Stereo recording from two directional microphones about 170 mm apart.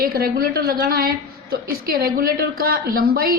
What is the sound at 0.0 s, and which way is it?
A woman's voice, 60° right (ahead or behind).